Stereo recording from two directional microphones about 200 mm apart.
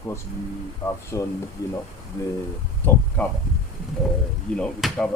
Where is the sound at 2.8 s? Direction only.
10° left (ahead or behind).